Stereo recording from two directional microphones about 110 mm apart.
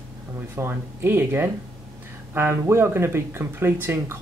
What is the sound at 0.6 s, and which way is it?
Speech, 20° right (ahead or behind).